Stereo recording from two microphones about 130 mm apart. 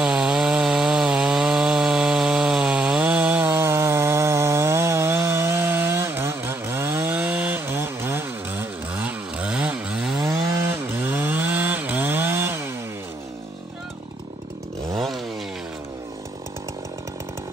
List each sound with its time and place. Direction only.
0.0 s wood: 5° right (ahead or behind)
11.0 s chainsaw: 15° right (ahead or behind)
15.0 s chainsaw: centre (ahead or behind)